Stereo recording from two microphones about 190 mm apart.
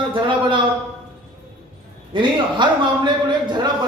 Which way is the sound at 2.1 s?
25° right (ahead or behind).